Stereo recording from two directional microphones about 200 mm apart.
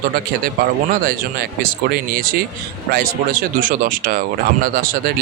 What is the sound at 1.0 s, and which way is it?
Speech, 50° right (ahead or behind).